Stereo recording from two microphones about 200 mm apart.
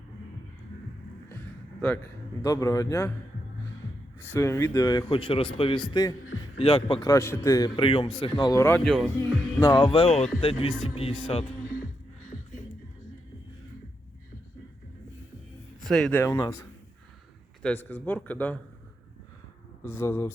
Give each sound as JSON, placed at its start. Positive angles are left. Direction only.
{"t": 2.4, "sound": "a man's voice", "side_deg": 15}
{"t": 4.2, "sound": "a man's voice", "side_deg": 10}
{"t": 15.8, "sound": "a man's voice", "side_deg": 0}
{"t": 19.8, "sound": "a man's voice", "side_deg": 10}